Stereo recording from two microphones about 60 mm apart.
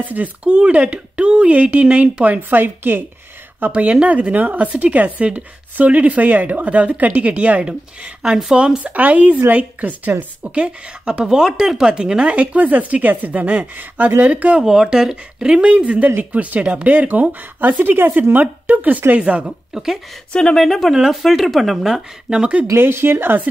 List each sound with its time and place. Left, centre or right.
0.0 s speech: right
14.7 s speech: centre
15.7 s speech: right
19.4 s speech: centre
22.8 s speech: right